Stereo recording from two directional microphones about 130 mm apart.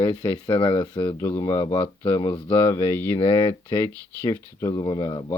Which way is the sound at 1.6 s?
35° left (ahead or behind).